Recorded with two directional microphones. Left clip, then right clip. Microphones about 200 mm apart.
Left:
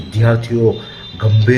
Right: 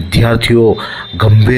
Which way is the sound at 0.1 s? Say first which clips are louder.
Right 6 dB; 30° right (ahead or behind).